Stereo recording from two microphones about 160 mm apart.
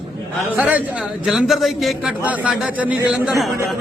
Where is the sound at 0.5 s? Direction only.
10° right (ahead or behind).